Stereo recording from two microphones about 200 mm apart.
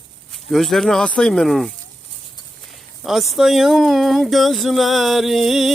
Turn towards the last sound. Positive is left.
turn(degrees=0)  # may be behind; listen again after turning